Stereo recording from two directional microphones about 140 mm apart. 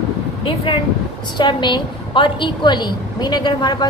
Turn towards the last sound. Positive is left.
turn(degrees=30)  # may be behind; listen again after turning